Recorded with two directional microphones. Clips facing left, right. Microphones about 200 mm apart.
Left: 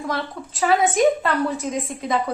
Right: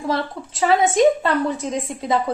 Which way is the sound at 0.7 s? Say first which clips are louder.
Right 2 dB; 25° right (ahead or behind).